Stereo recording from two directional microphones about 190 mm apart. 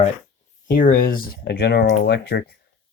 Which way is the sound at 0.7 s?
45° left (ahead or behind).